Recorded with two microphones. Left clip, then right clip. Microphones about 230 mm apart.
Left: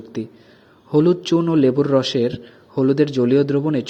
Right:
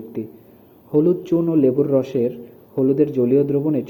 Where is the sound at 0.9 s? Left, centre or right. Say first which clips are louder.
Left 1 dB; left.